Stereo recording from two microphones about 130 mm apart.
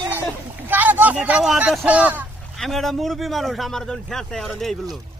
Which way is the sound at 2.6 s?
Centre (ahead or behind).